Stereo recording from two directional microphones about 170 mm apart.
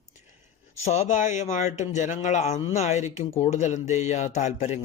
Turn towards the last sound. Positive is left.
turn(degrees=40)  # may be behind; listen again after turning